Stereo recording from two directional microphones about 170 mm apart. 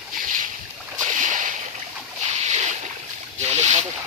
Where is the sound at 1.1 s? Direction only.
45° right (ahead or behind).